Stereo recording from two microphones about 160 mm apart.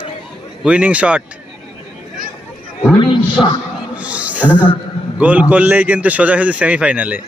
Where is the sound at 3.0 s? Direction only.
30° left (ahead or behind).